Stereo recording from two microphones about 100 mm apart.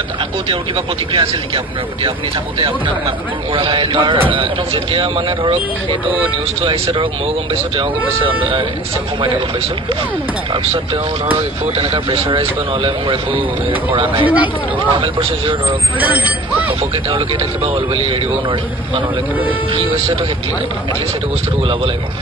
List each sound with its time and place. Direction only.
0.5 s speech: 65° right (ahead or behind)
3.5 s speech: 60° right (ahead or behind)
10.5 s speech: 60° right (ahead or behind)
14.2 s speech: 15° right (ahead or behind)
14.9 s speech: 65° right (ahead or behind)
16.0 s speech: 15° right (ahead or behind)
16.9 s speech: 60° right (ahead or behind)